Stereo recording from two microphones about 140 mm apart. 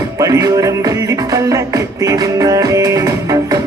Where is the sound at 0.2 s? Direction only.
25° right (ahead or behind).